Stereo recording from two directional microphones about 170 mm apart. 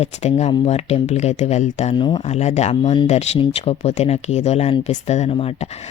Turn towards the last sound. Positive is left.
turn(degrees=35)  # may be behind; listen again after turning